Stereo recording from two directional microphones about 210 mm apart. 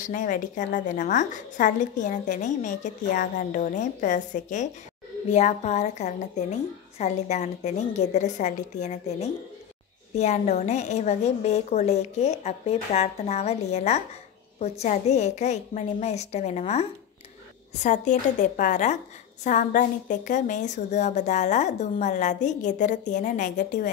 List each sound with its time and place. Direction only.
0.0 s a woman's voice: 40° left (ahead or behind)
17.8 s a woman's voice: 35° left (ahead or behind)